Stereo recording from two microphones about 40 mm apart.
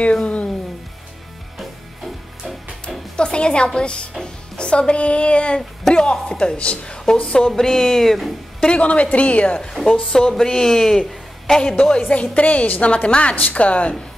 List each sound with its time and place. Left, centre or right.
0.0 s speech: left
3.2 s a woman's voice: left; by 8.6 s centre
8.6 s a woman's voice: left
9.6 s a woman's voice: centre
12.1 s a woman's voice: left
12.8 s a woman's voice: left